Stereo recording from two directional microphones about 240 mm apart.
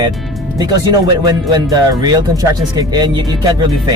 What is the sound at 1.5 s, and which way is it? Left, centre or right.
Speech, centre.